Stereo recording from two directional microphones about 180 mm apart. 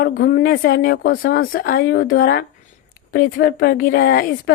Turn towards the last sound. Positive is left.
turn(degrees=60)  # may be behind; listen again after turning